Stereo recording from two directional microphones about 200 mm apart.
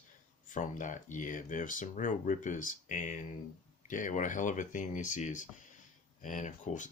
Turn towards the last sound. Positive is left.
turn(degrees=40)  # may be behind; listen again after turning